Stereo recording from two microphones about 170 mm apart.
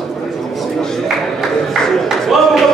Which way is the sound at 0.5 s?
5° left (ahead or behind).